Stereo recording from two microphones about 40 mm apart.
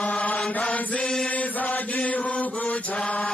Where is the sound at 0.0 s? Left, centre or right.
Left.